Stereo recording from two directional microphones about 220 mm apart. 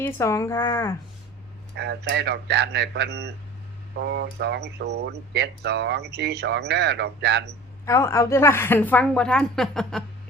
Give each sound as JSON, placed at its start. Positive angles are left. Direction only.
{"t": 0.0, "sound": "a woman's voice", "side_deg": 15}
{"t": 1.7, "sound": "speech", "side_deg": -50}
{"t": 7.9, "sound": "a woman's voice", "side_deg": 15}